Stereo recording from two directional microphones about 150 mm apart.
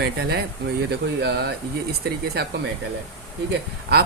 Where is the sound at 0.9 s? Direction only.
90° right.